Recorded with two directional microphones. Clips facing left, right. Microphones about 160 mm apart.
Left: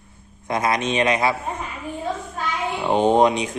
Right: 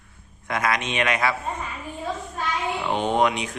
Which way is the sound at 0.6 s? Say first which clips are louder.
Left 4 dB; 35° left (ahead or behind).